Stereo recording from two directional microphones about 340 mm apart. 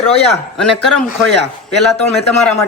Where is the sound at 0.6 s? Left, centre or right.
Centre.